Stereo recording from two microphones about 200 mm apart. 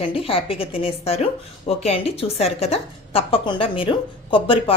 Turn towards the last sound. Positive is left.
turn(degrees=25)  # may be behind; listen again after turning